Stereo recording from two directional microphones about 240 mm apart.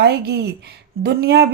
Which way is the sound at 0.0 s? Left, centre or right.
Right.